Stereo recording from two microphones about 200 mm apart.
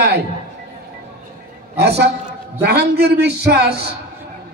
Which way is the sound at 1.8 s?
55° right (ahead or behind).